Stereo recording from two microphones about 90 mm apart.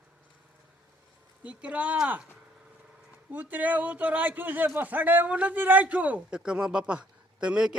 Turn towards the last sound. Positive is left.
turn(degrees=-10)  # may be behind; listen again after turning